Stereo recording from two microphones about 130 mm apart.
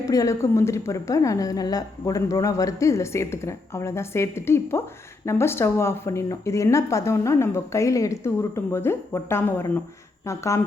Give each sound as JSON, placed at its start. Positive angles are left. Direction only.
{"t": 0.0, "sound": "a woman's voice", "side_deg": 25}